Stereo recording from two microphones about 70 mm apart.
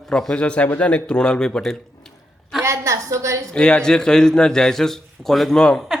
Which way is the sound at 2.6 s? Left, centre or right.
Right.